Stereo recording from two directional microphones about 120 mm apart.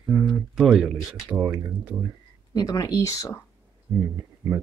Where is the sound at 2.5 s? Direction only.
35° left (ahead or behind).